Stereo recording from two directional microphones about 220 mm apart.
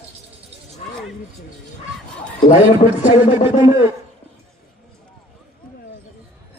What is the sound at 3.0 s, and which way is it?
Speech, 25° left (ahead or behind).